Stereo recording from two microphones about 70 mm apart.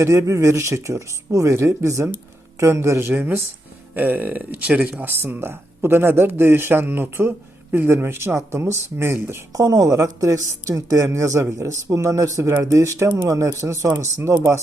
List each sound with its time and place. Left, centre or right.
0.0 s speech: right
3.2 s speech: right
9.5 s speech: right